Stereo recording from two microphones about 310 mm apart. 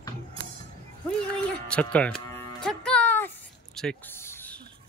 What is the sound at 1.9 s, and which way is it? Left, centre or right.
Cattle, centre.